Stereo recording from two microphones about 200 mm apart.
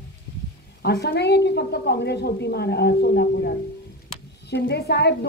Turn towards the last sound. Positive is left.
turn(degrees=55)  # may be behind; listen again after turning